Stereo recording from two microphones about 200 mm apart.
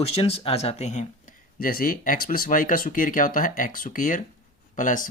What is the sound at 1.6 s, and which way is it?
Speech, 45° left (ahead or behind).